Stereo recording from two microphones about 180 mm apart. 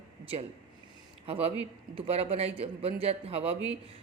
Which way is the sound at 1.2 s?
35° right (ahead or behind).